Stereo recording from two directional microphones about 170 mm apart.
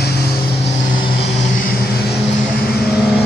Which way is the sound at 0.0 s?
70° left (ahead or behind).